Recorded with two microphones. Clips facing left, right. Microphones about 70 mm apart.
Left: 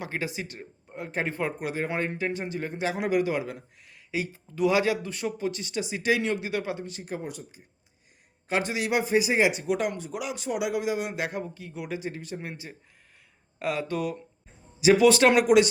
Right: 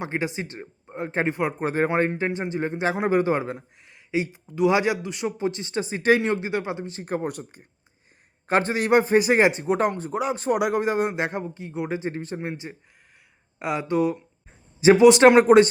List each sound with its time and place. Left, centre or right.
0.0 s a man's voice: right
1.3 s a man's voice: centre
1.6 s a man's voice: right
7.0 s a man's voice: right
9.5 s a man's voice: right
11.1 s a man's voice: right
14.8 s speech: right
15.0 s a man's voice: right